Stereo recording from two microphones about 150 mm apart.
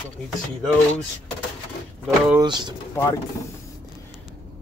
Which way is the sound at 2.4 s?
30° right (ahead or behind).